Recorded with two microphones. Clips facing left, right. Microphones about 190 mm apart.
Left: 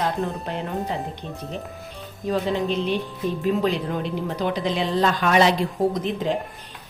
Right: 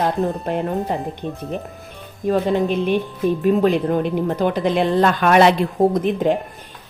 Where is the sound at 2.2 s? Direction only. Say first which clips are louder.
Right 5 dB; 50° right (ahead or behind).